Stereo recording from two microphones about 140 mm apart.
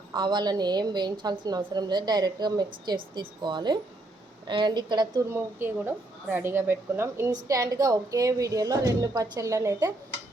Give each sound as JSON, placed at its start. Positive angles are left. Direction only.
{"t": 0.1, "sound": "a woman's voice", "side_deg": -30}
{"t": 5.3, "sound": "a woman's voice", "side_deg": -15}